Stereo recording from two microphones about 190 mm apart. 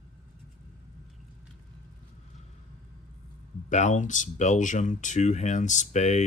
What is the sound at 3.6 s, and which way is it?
Speech, 40° left (ahead or behind).